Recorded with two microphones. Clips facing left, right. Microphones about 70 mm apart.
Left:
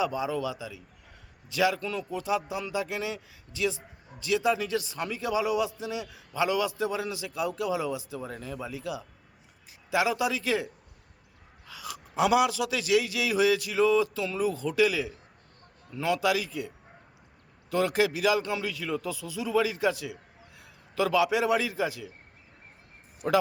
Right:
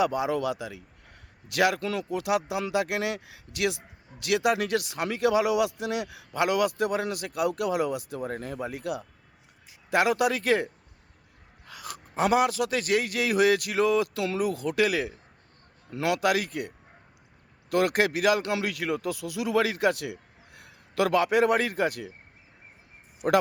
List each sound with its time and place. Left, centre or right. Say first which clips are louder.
0.0 s a man's voice: right 3 dB; right
2.1 s a man's voice: right 3 dB; right
11.6 s a man's voice: even; right
16.0 s a man's voice: right 2 dB; right
21.2 s speech: right 2 dB; right